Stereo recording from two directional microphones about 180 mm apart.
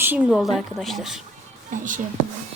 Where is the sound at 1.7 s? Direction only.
45° right (ahead or behind).